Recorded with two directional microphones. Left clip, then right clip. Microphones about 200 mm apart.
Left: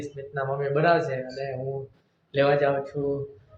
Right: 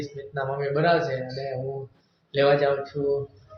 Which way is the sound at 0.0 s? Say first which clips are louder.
Even; 10° right (ahead or behind).